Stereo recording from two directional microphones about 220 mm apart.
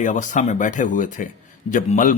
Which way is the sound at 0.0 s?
35° left (ahead or behind).